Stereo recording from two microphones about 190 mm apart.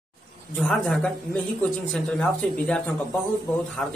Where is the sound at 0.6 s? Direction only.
5° left (ahead or behind).